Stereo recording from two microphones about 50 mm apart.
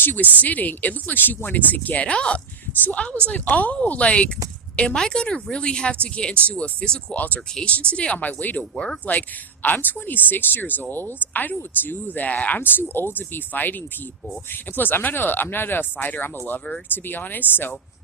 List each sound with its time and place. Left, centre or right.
0.0 s speech: left
7.2 s speech: left
7.6 s speech: left
8.7 s speech: centre
9.6 s speech: left
12.6 s speech: left